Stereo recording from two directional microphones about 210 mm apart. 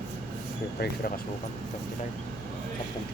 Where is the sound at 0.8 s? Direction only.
50° left (ahead or behind).